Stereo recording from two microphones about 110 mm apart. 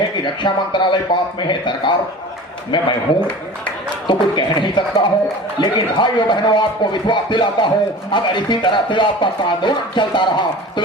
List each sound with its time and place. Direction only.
0.4 s speech: 45° left (ahead or behind)